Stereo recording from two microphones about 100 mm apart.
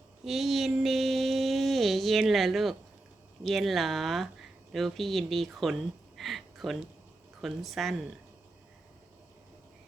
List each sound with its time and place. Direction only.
0.3 s mantra: centre (ahead or behind)
3.4 s speech: centre (ahead or behind)